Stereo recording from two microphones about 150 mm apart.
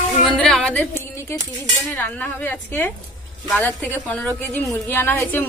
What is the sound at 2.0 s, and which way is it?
A woman's voice, 10° left (ahead or behind).